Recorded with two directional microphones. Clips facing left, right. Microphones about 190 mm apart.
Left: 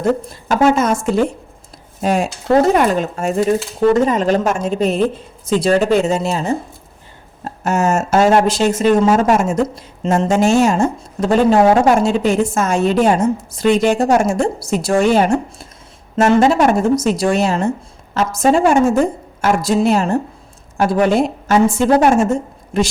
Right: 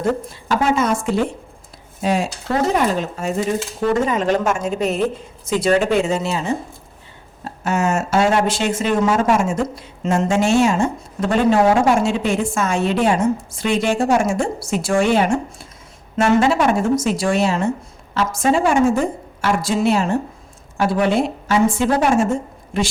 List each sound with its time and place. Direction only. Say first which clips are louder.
0.4 s a woman's voice: left 4 dB; 50° left (ahead or behind)
4.0 s a woman's voice: left 3 dB; 35° left (ahead or behind)